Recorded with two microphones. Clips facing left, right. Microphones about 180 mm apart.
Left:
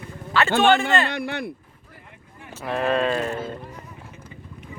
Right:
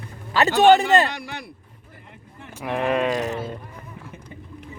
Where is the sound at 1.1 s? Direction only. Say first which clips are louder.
Left 7 dB; 55° left (ahead or behind).